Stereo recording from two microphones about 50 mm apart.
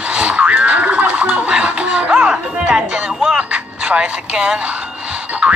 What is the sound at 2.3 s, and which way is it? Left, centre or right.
Speech, centre.